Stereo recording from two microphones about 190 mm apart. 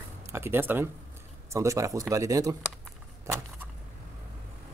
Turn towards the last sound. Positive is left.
turn(degrees=-15)  # may be behind; listen again after turning